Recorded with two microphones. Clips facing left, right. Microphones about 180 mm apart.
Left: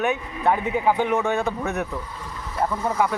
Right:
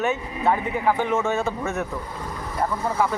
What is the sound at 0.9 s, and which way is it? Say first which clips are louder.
Speech: even; 15° left (ahead or behind).